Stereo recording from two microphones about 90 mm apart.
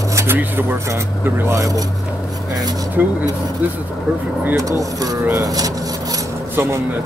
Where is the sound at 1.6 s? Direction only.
40° right (ahead or behind).